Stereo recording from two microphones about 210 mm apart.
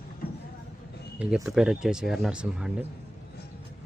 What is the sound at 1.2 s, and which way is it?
Speech, 5° right (ahead or behind).